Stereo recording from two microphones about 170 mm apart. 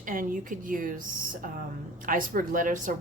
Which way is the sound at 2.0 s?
55° right (ahead or behind).